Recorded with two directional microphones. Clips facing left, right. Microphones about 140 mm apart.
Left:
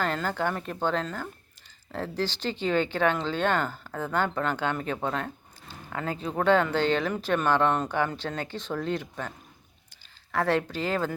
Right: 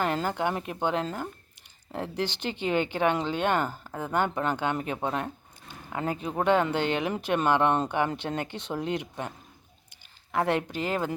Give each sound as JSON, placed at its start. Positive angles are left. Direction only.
{"t": 0.0, "sound": "speech", "side_deg": -15}
{"t": 10.3, "sound": "speech", "side_deg": -20}